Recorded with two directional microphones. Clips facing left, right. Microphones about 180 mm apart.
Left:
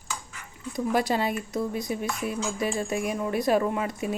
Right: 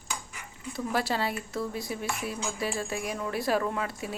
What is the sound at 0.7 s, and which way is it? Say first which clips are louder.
Speech: left 4 dB; 15° left (ahead or behind).